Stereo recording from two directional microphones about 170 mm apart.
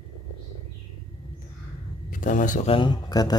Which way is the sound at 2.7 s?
30° left (ahead or behind).